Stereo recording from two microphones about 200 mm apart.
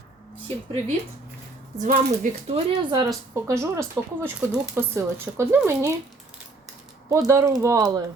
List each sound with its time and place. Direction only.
0.4 s speech: 30° right (ahead or behind)
2.9 s speech: 20° right (ahead or behind)
7.3 s speech: 15° right (ahead or behind)